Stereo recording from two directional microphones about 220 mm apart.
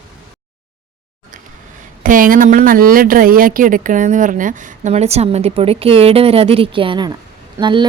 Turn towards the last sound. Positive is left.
turn(degrees=-20)  # may be behind; listen again after turning